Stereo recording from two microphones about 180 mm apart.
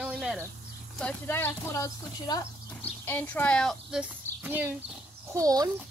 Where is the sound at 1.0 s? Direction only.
10° left (ahead or behind); by 4.7 s 10° right (ahead or behind).